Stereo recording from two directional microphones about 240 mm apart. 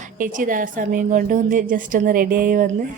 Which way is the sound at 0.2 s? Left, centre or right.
Right.